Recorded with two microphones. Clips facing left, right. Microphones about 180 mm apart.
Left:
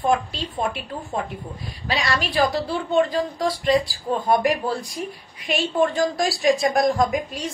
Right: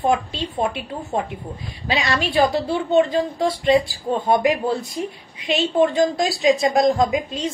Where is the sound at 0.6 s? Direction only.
25° right (ahead or behind).